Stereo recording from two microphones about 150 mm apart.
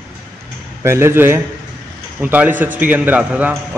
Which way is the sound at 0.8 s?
15° right (ahead or behind).